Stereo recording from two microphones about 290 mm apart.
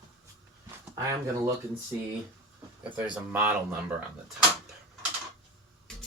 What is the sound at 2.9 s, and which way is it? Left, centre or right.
Speech, centre.